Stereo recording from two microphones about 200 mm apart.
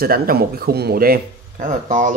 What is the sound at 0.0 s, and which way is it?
Speech, 50° right (ahead or behind).